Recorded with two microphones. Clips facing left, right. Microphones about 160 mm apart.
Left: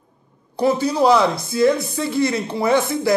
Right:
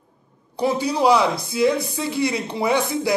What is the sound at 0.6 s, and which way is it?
Speech, 15° right (ahead or behind).